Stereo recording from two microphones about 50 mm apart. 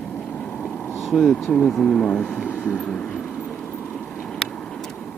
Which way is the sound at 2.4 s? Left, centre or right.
Left.